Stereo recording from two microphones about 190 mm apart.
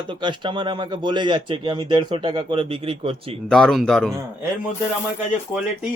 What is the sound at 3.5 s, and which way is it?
Speech, centre (ahead or behind).